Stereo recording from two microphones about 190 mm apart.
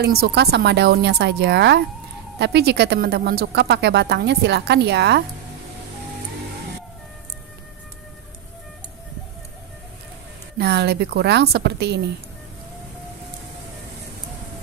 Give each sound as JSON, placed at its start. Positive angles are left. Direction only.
{"t": 0.0, "sound": "speech", "side_deg": -55}
{"t": 10.6, "sound": "speech", "side_deg": -60}